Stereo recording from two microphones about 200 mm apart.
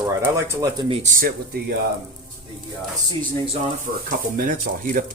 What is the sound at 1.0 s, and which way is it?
Speech, 45° right (ahead or behind).